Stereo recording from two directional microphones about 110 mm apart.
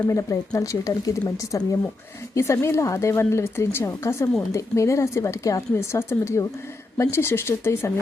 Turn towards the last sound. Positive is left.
turn(degrees=25)  # may be behind; listen again after turning